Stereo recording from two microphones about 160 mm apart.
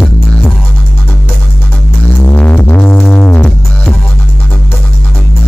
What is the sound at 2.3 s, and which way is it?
Music, 10° left (ahead or behind).